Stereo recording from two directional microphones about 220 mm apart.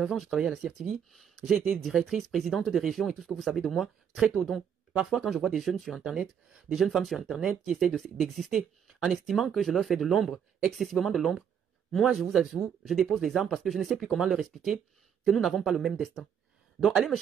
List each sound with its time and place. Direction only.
0.0 s speech: centre (ahead or behind)